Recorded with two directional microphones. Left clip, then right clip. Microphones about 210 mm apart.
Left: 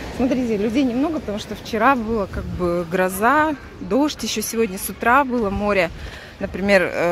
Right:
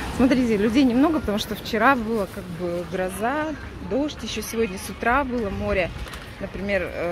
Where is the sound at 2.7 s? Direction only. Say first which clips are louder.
Left 6 dB; 30° left (ahead or behind).